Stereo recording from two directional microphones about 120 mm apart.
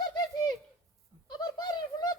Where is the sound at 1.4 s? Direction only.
35° left (ahead or behind).